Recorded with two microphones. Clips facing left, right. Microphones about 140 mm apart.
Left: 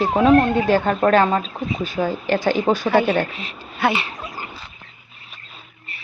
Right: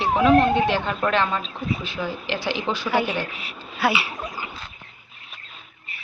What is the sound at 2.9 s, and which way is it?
Speech, 15° right (ahead or behind).